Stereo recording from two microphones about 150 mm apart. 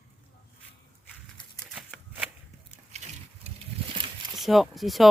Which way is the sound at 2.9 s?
45° right (ahead or behind).